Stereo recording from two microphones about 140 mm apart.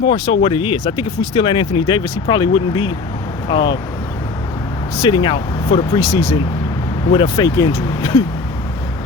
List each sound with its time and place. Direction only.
0.0 s speech: 40° left (ahead or behind)
4.9 s speech: 30° left (ahead or behind)
6.0 s speech: 25° left (ahead or behind)
7.3 s speech: 25° left (ahead or behind)